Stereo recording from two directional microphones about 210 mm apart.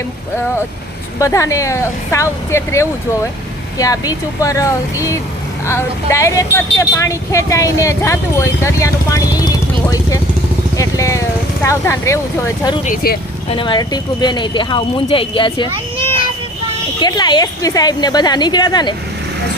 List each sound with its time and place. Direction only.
1.2 s speech: 15° left (ahead or behind)
10.8 s speech: 15° left (ahead or behind)
12.8 s speech: 40° left (ahead or behind)
13.5 s speech: 25° left (ahead or behind)
17.0 s speech: 20° left (ahead or behind)